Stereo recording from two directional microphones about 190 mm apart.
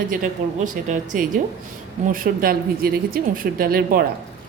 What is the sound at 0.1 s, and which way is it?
Speech, 45° right (ahead or behind).